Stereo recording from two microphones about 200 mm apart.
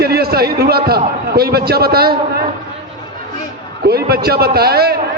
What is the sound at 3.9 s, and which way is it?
A man's voice, 50° right (ahead or behind).